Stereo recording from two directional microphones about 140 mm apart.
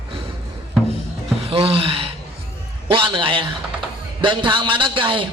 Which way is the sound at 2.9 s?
40° right (ahead or behind).